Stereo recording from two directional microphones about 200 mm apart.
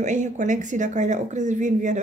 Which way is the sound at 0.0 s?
40° right (ahead or behind).